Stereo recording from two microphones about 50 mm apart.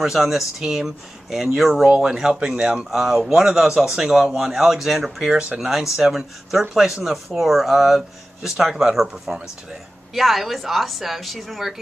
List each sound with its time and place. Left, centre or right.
0.0 s speech: centre; by 2.9 s right
2.9 s speech: centre
5.2 s speech: centre
5.6 s a woman's voice: centre
10.1 s a woman's voice: centre